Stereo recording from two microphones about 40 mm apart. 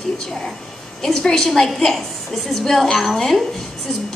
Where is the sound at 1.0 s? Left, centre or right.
Centre.